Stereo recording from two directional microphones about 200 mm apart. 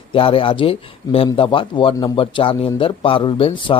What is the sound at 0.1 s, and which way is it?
Speech, 25° left (ahead or behind).